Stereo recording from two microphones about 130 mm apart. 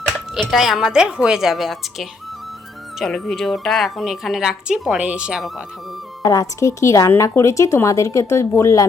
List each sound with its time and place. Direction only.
0.3 s a woman's voice: centre (ahead or behind)
6.2 s speech: 25° left (ahead or behind)